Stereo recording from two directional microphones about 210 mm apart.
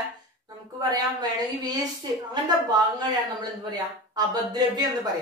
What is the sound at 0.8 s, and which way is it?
A woman's voice, 20° right (ahead or behind).